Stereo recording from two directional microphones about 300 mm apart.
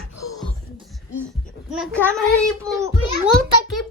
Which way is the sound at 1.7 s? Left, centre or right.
Centre.